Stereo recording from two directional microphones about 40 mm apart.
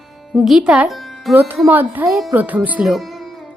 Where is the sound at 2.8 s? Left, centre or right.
Centre.